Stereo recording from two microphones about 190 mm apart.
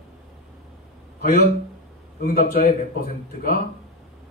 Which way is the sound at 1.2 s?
55° left (ahead or behind).